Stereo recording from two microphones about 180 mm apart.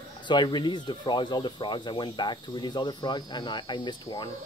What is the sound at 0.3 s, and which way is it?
Speech, 25° left (ahead or behind).